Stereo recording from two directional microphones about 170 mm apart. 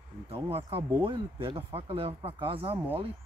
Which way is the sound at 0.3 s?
35° right (ahead or behind).